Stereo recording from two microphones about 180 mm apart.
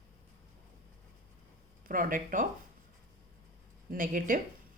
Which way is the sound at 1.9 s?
50° right (ahead or behind).